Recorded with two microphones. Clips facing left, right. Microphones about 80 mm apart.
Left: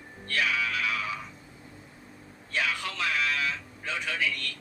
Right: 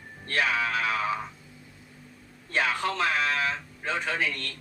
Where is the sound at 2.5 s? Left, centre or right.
Right.